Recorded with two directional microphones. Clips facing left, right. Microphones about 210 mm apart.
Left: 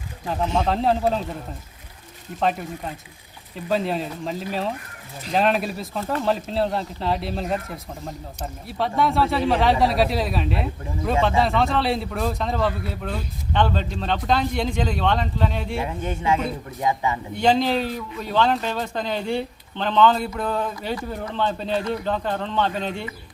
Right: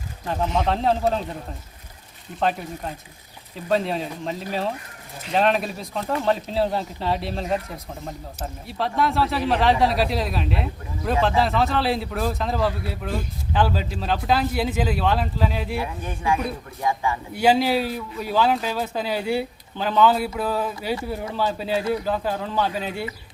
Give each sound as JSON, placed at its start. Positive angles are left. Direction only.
{"t": 0.3, "sound": "a man's voice", "side_deg": 0}
{"t": 2.4, "sound": "a man's voice", "side_deg": 0}
{"t": 15.8, "sound": "speech", "side_deg": 25}
{"t": 17.3, "sound": "speech", "side_deg": -5}